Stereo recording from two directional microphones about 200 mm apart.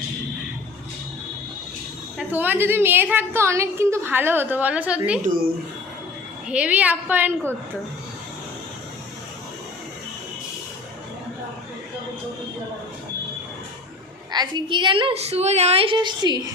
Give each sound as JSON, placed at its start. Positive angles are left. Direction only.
{"t": 2.1, "sound": "a woman's voice", "side_deg": -10}
{"t": 6.5, "sound": "a woman's voice", "side_deg": -5}
{"t": 14.3, "sound": "a woman's voice", "side_deg": -20}